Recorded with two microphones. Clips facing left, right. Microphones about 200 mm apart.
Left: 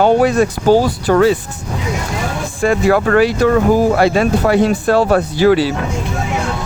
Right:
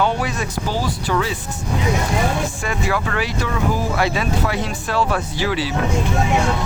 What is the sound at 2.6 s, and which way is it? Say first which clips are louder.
Speech: left 10 dB; 55° left (ahead or behind).